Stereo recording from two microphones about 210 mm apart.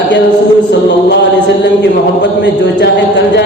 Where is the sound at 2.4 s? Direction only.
55° left (ahead or behind).